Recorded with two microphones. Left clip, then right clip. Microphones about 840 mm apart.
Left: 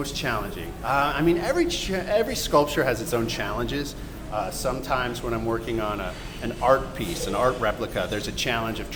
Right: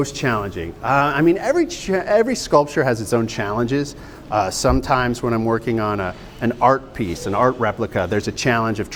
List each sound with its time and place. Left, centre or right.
0.0 s speech: right